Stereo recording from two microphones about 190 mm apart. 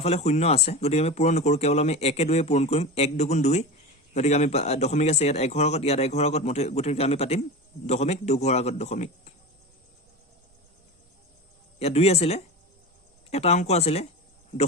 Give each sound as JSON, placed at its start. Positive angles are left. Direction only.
{"t": 0.0, "sound": "speech", "side_deg": 35}
{"t": 11.8, "sound": "speech", "side_deg": 35}